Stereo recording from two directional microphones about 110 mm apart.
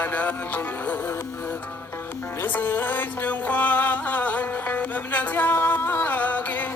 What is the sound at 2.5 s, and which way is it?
Music, 20° left (ahead or behind).